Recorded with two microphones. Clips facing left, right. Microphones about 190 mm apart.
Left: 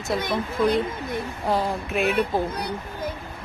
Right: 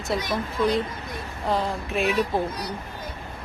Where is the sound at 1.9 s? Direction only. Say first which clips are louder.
Left 1 dB; centre (ahead or behind).